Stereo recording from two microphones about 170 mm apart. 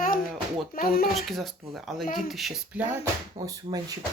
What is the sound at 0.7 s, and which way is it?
Speech, 55° left (ahead or behind).